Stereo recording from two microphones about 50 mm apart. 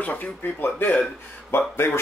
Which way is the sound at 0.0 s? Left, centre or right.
Left.